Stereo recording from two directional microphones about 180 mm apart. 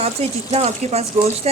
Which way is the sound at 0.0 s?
35° right (ahead or behind).